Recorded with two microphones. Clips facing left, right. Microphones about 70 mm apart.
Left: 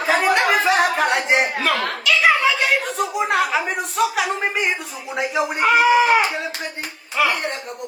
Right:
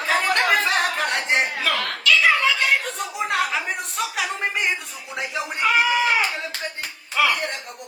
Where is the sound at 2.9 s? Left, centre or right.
Centre.